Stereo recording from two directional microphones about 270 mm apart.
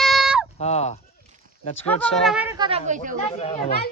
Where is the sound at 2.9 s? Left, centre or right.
Right.